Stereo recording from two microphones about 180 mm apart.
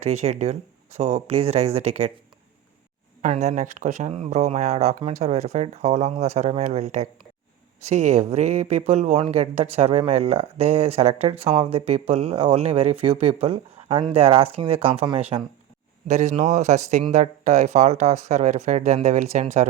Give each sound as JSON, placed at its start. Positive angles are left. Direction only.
{"t": 0.0, "sound": "speech", "side_deg": -35}
{"t": 3.2, "sound": "speech", "side_deg": -40}
{"t": 16.0, "sound": "speech", "side_deg": -40}